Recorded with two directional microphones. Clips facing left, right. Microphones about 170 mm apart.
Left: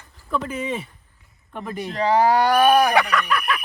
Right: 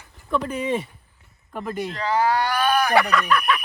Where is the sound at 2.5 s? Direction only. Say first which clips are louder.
Left 6 dB; 25° left (ahead or behind).